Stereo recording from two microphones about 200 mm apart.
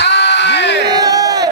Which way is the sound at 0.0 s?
60° left (ahead or behind).